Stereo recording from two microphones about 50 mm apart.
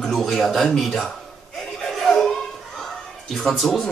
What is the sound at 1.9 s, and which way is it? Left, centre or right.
Laughter, centre.